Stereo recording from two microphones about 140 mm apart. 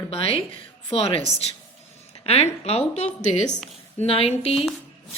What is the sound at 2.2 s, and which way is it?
Speech, 45° left (ahead or behind).